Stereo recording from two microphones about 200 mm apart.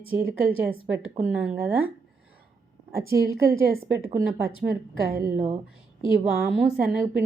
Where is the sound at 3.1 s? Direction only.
15° right (ahead or behind).